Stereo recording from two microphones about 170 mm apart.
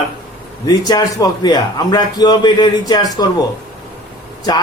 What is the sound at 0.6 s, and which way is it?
Speech, 25° left (ahead or behind).